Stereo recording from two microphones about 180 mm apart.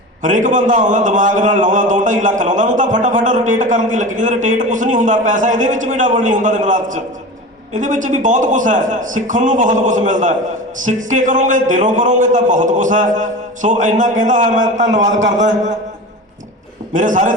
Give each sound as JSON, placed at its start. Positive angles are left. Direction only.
{"t": 0.2, "sound": "a man's voice", "side_deg": -45}
{"t": 16.9, "sound": "a man's voice", "side_deg": -45}